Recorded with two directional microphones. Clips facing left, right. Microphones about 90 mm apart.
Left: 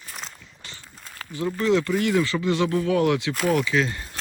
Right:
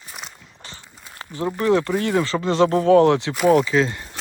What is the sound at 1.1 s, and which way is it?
Speech, 20° right (ahead or behind).